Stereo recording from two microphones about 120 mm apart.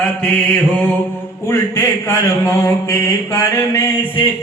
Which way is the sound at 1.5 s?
20° left (ahead or behind).